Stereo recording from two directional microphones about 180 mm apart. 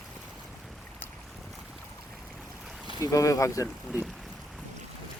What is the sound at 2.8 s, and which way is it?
Speech, 20° left (ahead or behind).